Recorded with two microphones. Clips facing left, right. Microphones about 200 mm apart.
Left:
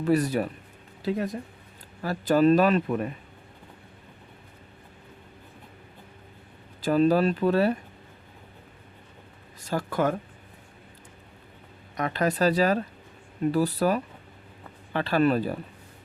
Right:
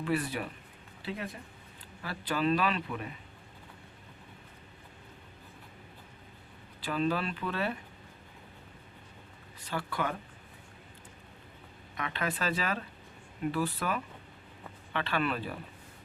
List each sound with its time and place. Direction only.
0.0 s a man's voice: 40° left (ahead or behind)
6.8 s speech: 40° left (ahead or behind)
9.6 s a man's voice: 45° left (ahead or behind)
11.9 s speech: 40° left (ahead or behind)